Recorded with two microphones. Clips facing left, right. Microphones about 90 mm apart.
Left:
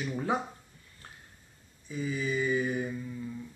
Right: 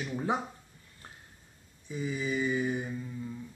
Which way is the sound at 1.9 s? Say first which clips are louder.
Left 1 dB; 20° right (ahead or behind).